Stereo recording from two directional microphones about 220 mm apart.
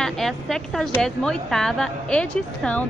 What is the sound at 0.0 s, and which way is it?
Speech, centre (ahead or behind).